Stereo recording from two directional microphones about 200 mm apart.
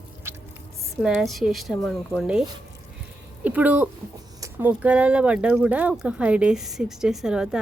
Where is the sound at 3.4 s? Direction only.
5° right (ahead or behind).